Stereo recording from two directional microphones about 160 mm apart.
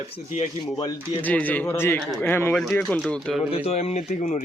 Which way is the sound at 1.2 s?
10° left (ahead or behind).